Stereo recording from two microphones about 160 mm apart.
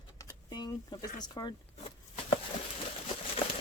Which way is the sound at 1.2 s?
25° left (ahead or behind).